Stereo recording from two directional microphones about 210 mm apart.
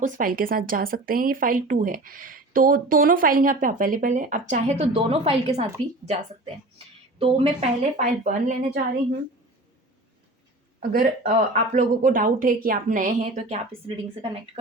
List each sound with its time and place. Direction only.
0.0 s speech: 40° right (ahead or behind)
7.2 s speech: 25° right (ahead or behind)
10.8 s speech: 35° right (ahead or behind)